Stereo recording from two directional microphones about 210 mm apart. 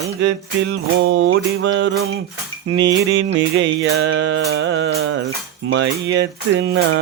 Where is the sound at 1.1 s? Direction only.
65° right (ahead or behind).